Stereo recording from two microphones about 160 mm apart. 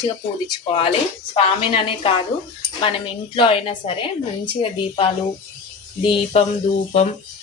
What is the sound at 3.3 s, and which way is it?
Speech, 35° left (ahead or behind).